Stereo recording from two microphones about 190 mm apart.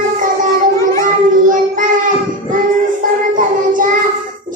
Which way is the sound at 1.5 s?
45° right (ahead or behind).